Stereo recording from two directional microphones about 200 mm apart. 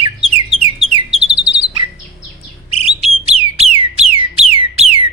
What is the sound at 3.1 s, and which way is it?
Alarm, 30° right (ahead or behind).